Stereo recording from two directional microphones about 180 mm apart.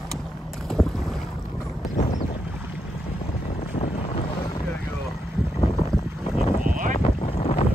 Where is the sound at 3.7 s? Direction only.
35° left (ahead or behind).